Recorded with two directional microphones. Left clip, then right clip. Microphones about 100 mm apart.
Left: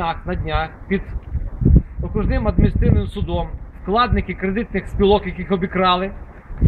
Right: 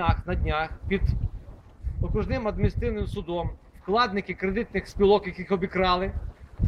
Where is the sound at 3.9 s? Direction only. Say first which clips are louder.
Left 6 dB; 45° right (ahead or behind).